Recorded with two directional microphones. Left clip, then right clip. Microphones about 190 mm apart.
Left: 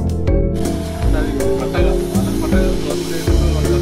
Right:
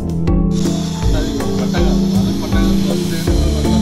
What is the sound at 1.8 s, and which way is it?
Music, 20° left (ahead or behind).